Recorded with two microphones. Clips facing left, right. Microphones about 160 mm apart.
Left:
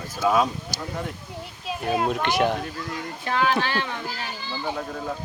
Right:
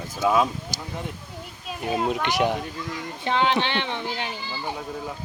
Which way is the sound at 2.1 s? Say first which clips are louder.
Left 1 dB; 15° right (ahead or behind).